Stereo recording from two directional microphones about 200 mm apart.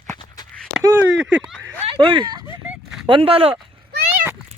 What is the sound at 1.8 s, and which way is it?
Speech, 25° right (ahead or behind).